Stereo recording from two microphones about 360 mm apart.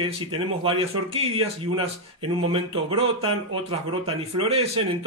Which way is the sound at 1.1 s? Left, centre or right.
Centre.